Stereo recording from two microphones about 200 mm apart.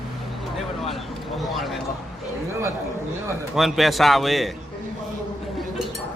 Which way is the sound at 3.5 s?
Centre (ahead or behind).